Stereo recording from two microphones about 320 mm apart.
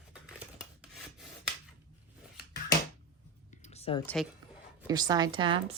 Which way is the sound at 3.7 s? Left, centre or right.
Centre.